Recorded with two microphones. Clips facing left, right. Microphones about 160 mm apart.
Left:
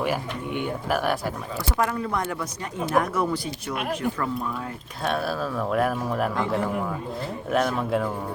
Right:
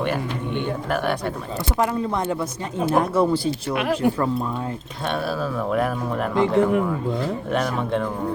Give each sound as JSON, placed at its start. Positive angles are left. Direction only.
{"t": 0.0, "sound": "speech", "side_deg": 5}
{"t": 1.8, "sound": "speech", "side_deg": -25}
{"t": 3.8, "sound": "speech", "side_deg": -90}
{"t": 5.0, "sound": "speech", "side_deg": 0}